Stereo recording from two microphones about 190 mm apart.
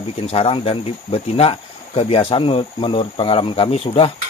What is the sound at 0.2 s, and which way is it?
Speech, 30° left (ahead or behind).